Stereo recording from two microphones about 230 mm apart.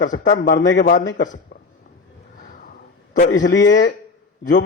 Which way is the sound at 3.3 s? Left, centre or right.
Left.